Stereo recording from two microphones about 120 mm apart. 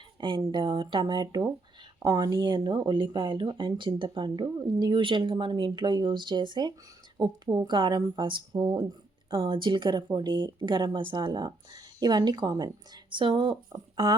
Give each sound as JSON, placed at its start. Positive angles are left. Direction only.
{"t": 0.2, "sound": "speech", "side_deg": -40}